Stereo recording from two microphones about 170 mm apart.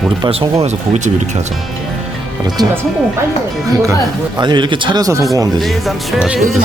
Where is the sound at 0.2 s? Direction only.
35° right (ahead or behind).